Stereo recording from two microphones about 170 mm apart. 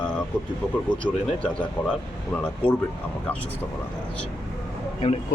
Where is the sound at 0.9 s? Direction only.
10° left (ahead or behind).